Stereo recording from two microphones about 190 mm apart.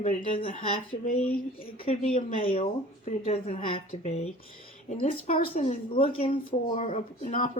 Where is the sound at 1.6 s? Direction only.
30° left (ahead or behind).